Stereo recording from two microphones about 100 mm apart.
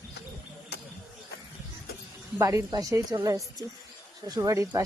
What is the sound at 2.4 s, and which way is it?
A woman's voice, 35° right (ahead or behind).